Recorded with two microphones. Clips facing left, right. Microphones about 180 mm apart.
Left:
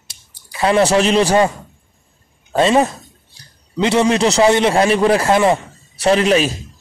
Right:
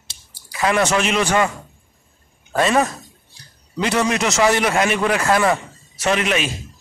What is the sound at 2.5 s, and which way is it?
A man's voice, 25° left (ahead or behind).